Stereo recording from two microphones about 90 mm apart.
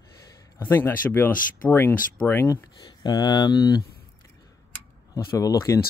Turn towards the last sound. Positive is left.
turn(degrees=35)  # may be behind; listen again after turning